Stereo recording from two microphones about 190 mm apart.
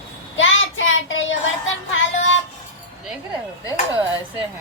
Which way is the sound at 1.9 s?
90° left.